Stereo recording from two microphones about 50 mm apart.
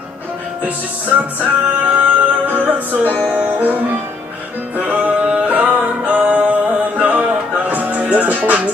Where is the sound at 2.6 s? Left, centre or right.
Right.